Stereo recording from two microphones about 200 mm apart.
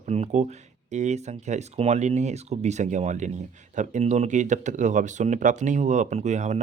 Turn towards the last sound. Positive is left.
turn(degrees=-35)  # may be behind; listen again after turning